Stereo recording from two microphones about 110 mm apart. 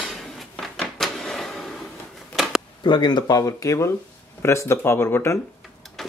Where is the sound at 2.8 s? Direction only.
40° left (ahead or behind); by 5.4 s 25° left (ahead or behind).